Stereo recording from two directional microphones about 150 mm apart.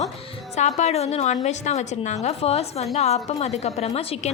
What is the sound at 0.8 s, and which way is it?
A woman's voice, 45° left (ahead or behind).